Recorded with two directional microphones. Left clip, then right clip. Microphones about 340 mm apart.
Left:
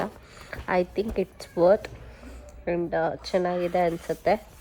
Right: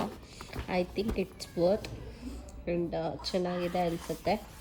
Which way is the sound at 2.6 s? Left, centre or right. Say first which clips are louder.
Left 7 dB; centre.